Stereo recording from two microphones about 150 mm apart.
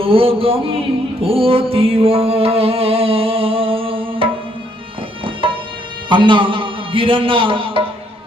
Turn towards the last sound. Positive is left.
turn(degrees=-35)  # may be behind; listen again after turning